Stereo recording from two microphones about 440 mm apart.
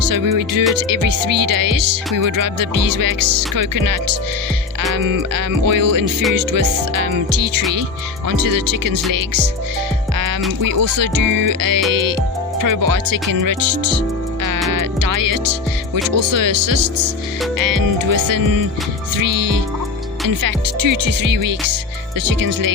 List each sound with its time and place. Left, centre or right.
0.0 s music: right
10.6 s music: right